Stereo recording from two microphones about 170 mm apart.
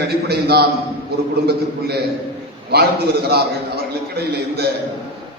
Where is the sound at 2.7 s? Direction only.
70° right (ahead or behind).